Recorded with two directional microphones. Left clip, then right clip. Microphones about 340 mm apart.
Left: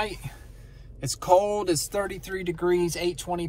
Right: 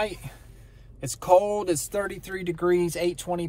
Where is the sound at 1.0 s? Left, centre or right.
Centre.